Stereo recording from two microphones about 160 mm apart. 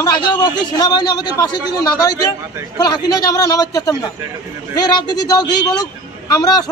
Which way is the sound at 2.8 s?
25° left (ahead or behind).